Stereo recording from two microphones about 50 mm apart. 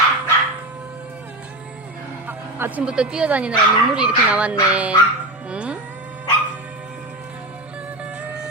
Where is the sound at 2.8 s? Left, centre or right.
Centre.